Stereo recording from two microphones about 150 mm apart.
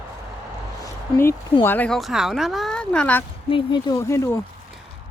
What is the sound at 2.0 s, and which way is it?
Speech, centre (ahead or behind).